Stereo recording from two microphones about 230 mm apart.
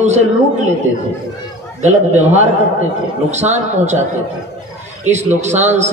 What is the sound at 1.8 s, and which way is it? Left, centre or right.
A man's voice, right.